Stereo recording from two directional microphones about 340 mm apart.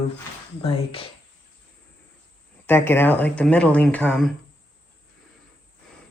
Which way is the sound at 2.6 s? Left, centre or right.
Centre.